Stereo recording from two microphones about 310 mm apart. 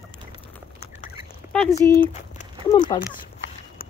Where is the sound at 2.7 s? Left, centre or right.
Left.